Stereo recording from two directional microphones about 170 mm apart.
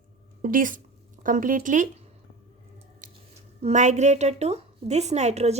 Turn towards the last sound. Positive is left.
turn(degrees=-40)  # may be behind; listen again after turning